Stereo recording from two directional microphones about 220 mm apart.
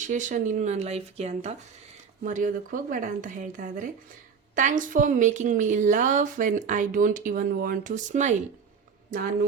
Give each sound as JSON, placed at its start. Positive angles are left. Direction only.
{"t": 0.1, "sound": "a woman's voice", "side_deg": -35}